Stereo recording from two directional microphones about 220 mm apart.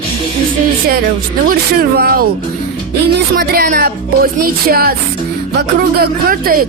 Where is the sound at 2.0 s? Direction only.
40° right (ahead or behind).